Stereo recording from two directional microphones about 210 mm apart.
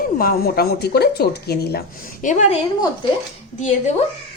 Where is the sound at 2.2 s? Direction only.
35° left (ahead or behind).